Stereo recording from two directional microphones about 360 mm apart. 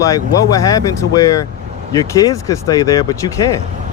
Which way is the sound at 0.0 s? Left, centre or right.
Centre.